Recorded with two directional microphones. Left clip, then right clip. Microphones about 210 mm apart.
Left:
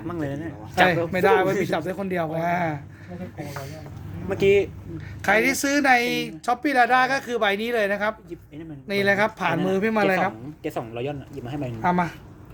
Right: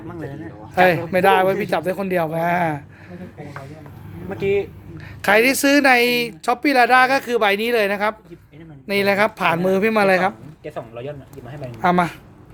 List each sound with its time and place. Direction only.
0.1 s speech: 45° left (ahead or behind)
0.9 s speech: 35° right (ahead or behind)
4.3 s speech: 55° left (ahead or behind)
4.9 s speech: 35° right (ahead or behind)
10.6 s speech: 50° left (ahead or behind)
11.8 s speech: 50° right (ahead or behind)